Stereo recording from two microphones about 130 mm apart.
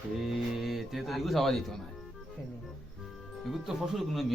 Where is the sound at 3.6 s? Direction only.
Centre (ahead or behind).